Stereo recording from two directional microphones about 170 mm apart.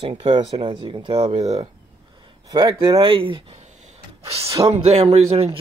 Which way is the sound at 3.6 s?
45° right (ahead or behind).